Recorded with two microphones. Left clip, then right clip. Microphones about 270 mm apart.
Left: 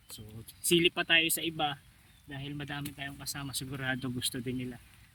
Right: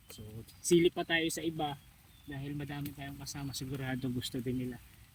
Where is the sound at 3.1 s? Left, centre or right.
Centre.